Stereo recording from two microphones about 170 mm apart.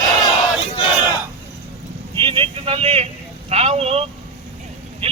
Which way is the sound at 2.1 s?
30° right (ahead or behind).